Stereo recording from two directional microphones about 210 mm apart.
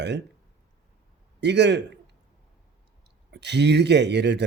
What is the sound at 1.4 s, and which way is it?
Speech, 55° right (ahead or behind).